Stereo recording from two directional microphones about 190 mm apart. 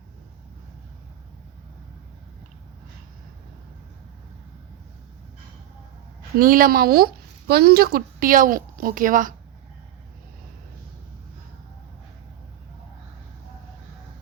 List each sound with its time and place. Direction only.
6.4 s a woman's voice: 45° right (ahead or behind)